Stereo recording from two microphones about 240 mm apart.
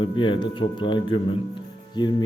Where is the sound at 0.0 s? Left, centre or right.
Centre.